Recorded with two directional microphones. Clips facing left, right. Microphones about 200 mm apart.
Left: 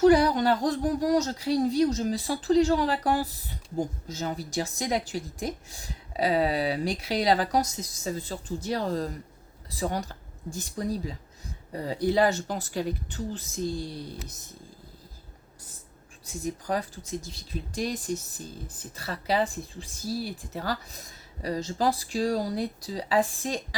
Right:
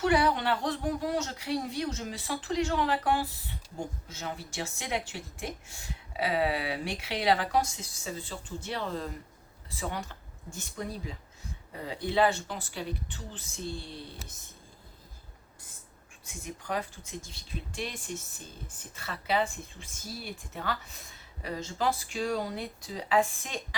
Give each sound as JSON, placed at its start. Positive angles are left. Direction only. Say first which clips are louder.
{"t": 0.0, "sound": "speech", "louder": "left 7 dB", "side_deg": 40}
{"t": 16.2, "sound": "speech", "louder": "left 8 dB", "side_deg": 40}